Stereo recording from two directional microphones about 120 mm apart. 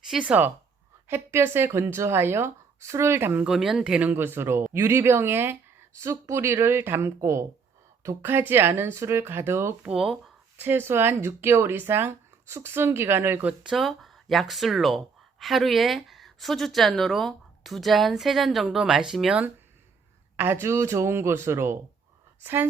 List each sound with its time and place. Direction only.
0.1 s speech: 10° right (ahead or behind)
3.4 s speech: 5° right (ahead or behind)
4.1 s speech: 20° right (ahead or behind)
9.9 s speech: centre (ahead or behind)
10.6 s speech: 20° right (ahead or behind)
13.5 s speech: centre (ahead or behind)
20.3 s speech: 20° right (ahead or behind)